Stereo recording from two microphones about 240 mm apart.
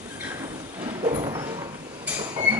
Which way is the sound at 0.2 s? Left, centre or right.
Centre.